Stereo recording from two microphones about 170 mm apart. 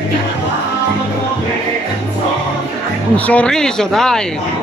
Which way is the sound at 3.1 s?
10° left (ahead or behind).